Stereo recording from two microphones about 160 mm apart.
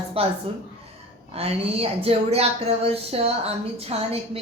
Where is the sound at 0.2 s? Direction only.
35° right (ahead or behind).